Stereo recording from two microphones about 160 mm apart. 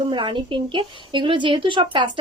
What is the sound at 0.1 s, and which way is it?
A woman's voice, 30° right (ahead or behind).